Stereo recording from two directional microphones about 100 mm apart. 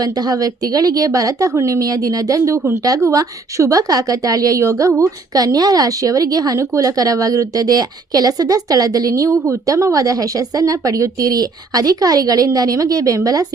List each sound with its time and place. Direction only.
0.0 s a woman's voice: 40° right (ahead or behind)